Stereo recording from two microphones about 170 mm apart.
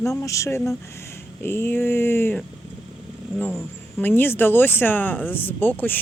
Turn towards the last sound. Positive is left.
turn(degrees=10)  # may be behind; listen again after turning